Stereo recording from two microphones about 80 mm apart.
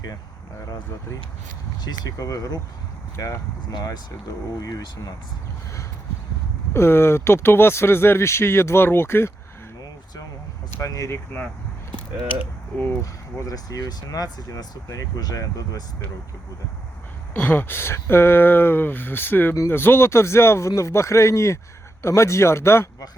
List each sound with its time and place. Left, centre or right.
1.8 s speech: left
3.7 s speech: left
6.7 s speech: left
10.8 s speech: left
12.7 s speech: left
13.0 s speech: left
17.3 s speech: left